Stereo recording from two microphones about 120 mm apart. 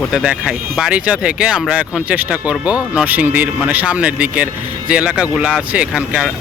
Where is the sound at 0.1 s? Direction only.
5° right (ahead or behind).